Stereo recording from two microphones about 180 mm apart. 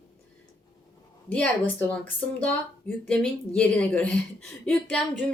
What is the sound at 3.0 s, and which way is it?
A woman's voice, 10° left (ahead or behind).